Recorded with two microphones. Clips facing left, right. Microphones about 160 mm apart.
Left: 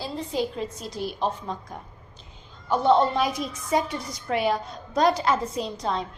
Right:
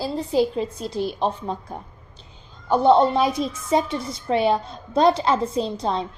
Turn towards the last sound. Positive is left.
turn(degrees=-30)  # may be behind; listen again after turning